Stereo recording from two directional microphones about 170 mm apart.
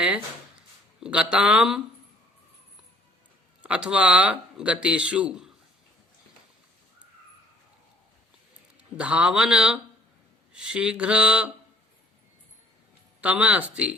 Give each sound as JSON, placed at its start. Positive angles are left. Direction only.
{"t": 1.0, "sound": "a man's voice", "side_deg": -5}
{"t": 3.6, "sound": "speech", "side_deg": -5}
{"t": 9.0, "sound": "a man's voice", "side_deg": -5}
{"t": 13.2, "sound": "speech", "side_deg": -10}